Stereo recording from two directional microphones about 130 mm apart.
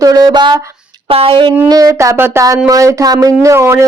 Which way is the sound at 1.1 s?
45° right (ahead or behind).